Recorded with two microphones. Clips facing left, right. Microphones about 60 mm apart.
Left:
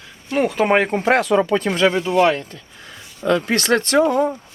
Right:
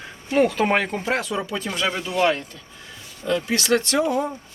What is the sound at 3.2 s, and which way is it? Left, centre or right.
Speech, left.